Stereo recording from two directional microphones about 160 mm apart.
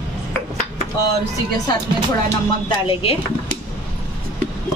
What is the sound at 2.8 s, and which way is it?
Speech, 35° left (ahead or behind).